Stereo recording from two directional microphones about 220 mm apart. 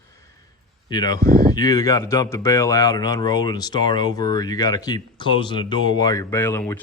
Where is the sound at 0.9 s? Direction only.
20° left (ahead or behind).